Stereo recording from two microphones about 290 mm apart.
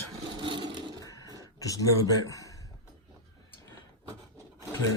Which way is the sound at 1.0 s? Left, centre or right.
Centre.